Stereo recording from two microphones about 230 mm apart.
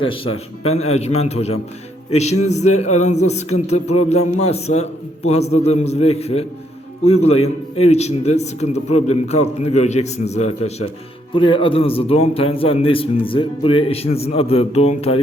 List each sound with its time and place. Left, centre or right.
0.0 s a man's voice: left